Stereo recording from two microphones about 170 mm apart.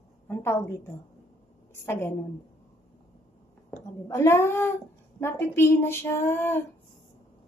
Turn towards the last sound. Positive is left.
turn(degrees=15)  # may be behind; listen again after turning